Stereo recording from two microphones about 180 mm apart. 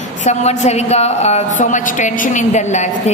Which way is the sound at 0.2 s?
40° left (ahead or behind).